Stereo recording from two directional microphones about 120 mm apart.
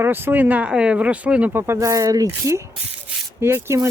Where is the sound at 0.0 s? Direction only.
15° right (ahead or behind).